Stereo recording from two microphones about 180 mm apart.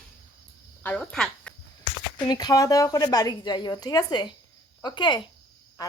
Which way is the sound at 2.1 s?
20° left (ahead or behind).